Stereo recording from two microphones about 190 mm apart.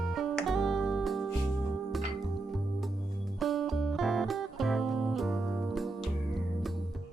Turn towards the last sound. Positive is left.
turn(degrees=0)  # may be behind; listen again after turning